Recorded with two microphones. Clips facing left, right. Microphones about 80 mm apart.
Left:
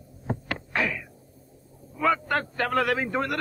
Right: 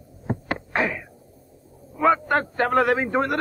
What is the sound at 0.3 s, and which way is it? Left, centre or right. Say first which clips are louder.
Heart sounds: right 4 dB; right.